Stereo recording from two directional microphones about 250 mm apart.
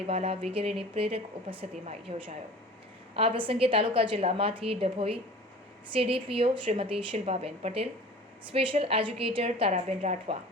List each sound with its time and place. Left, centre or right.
0.1 s speech: right